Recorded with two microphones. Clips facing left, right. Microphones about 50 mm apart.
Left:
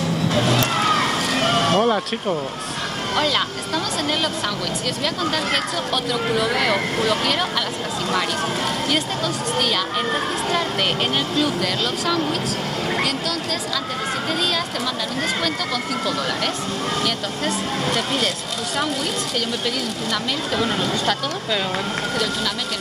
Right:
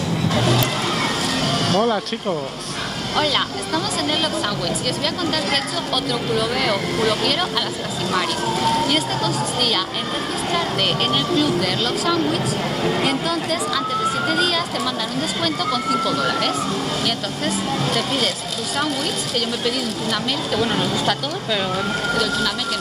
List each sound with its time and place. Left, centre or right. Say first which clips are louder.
1.4 s a sound: left 2 dB; left
3.2 s speech: right 1 dB; centre
6.3 s speech: left 1 dB; centre
8.8 s speech: right 2 dB; centre
15.4 s speech: right 3 dB; centre
20.6 s speech: right 1 dB; centre